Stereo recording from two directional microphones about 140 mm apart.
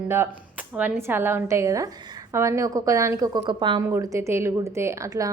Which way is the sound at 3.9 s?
20° right (ahead or behind).